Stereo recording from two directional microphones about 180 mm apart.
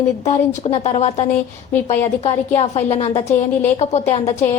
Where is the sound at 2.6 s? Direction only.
35° left (ahead or behind).